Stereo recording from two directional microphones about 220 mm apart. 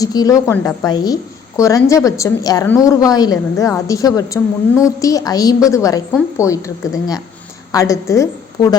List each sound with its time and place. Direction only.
0.0 s a woman's voice: 15° left (ahead or behind)
7.7 s a woman's voice: 15° left (ahead or behind)